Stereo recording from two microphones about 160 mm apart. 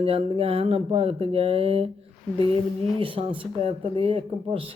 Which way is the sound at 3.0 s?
35° right (ahead or behind).